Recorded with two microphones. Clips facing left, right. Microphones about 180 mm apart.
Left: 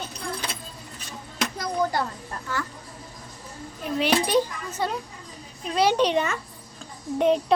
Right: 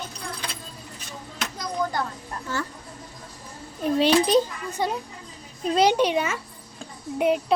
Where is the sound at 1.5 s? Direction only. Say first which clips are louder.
Left 2 dB; 60° left (ahead or behind).